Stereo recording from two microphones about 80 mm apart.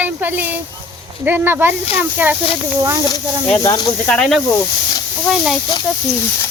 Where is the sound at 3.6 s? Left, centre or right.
Left.